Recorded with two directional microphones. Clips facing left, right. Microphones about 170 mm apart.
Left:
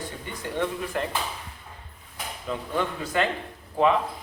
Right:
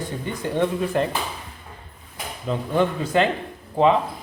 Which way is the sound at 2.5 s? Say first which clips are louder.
Right 7 dB; 25° right (ahead or behind).